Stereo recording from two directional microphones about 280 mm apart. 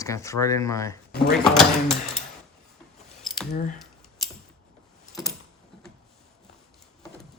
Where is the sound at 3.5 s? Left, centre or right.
Left.